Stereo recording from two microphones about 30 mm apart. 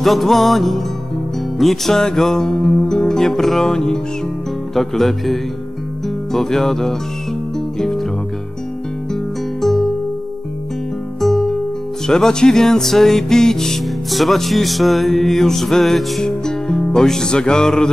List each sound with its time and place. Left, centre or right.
0.0 s music: centre
2.0 s music: centre
4.7 s music: centre
9.1 s music: centre
11.1 s music: centre
14.1 s music: centre
16.2 s music: left